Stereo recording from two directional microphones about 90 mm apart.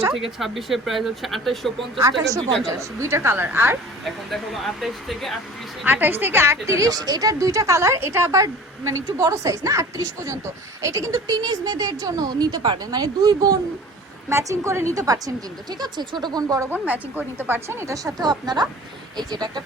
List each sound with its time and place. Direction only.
0.1 s speech: 5° right (ahead or behind)
2.7 s speech: 30° right (ahead or behind)
4.0 s speech: centre (ahead or behind)
5.8 s a woman's voice: 20° right (ahead or behind); by 12.8 s 60° right (ahead or behind)
12.8 s a woman's voice: 45° right (ahead or behind)
14.3 s a woman's voice: 35° right (ahead or behind)
15.8 s a woman's voice: 50° right (ahead or behind)
16.6 s a woman's voice: 20° right (ahead or behind); by 19.6 s 50° right (ahead or behind)